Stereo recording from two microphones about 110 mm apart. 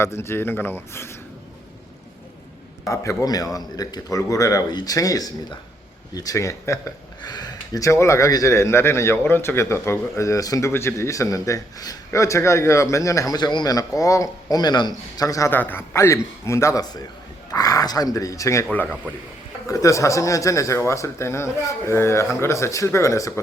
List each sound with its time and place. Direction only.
0.0 s a man's voice: 25° left (ahead or behind)
2.9 s a man's voice: 30° left (ahead or behind)
7.2 s a man's voice: 40° left (ahead or behind)
15.5 s a man's voice: 20° left (ahead or behind)
18.7 s speech: 15° left (ahead or behind)
19.6 s a man's voice: 30° left (ahead or behind)